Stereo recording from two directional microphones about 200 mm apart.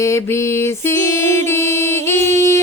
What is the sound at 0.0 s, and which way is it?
Music, 15° left (ahead or behind).